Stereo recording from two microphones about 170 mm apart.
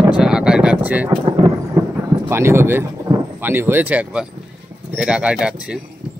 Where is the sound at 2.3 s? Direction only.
15° right (ahead or behind).